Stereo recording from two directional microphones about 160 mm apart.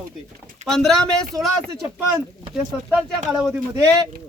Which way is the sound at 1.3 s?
20° right (ahead or behind).